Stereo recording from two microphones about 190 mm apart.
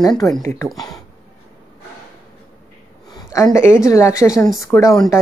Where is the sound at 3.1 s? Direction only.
20° left (ahead or behind).